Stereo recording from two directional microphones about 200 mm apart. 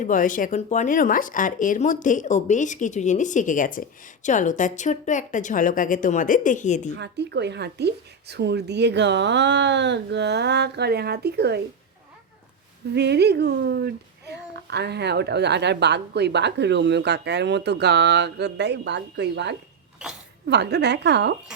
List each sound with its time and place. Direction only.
0.0 s speech: 40° left (ahead or behind)
6.9 s a child's voice: 60° right (ahead or behind)
12.9 s a child's voice: 55° right (ahead or behind)